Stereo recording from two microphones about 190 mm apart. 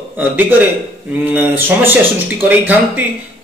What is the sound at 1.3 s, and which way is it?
Speech, 10° right (ahead or behind).